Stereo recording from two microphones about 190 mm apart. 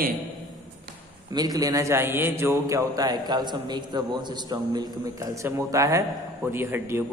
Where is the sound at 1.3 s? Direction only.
20° right (ahead or behind).